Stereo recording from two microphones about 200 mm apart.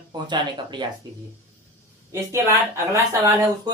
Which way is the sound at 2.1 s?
15° right (ahead or behind).